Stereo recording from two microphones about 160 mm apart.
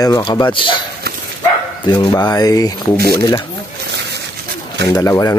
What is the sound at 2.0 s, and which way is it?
Speech, 25° left (ahead or behind).